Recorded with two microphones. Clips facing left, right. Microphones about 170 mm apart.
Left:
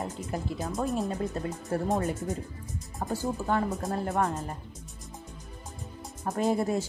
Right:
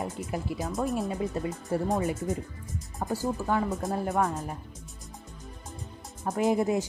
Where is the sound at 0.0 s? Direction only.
Centre (ahead or behind).